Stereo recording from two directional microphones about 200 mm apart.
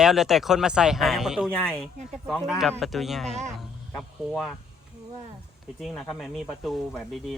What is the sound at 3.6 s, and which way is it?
Speech, centre (ahead or behind).